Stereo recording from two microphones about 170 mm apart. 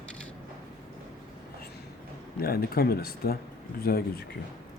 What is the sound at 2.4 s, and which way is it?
Speech, 65° left (ahead or behind).